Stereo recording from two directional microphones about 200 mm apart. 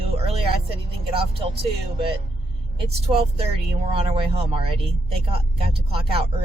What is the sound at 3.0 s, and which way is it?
Speech, 30° right (ahead or behind).